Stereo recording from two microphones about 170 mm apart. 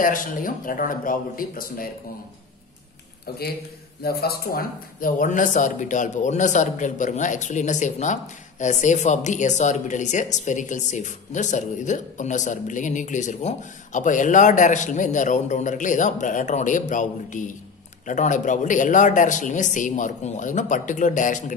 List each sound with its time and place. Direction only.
0.0 s speech: 55° left (ahead or behind)
4.0 s speech: 65° left (ahead or behind); by 21.5 s 50° left (ahead or behind)